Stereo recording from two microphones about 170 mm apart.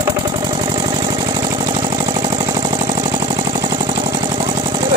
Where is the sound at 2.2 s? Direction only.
25° right (ahead or behind).